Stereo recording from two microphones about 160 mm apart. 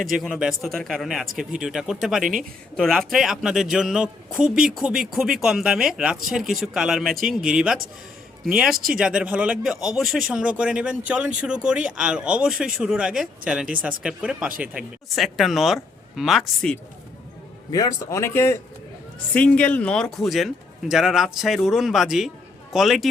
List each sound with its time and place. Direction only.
0.2 s speech: centre (ahead or behind)
17.7 s a man's voice: 20° left (ahead or behind); by 23.0 s centre (ahead or behind)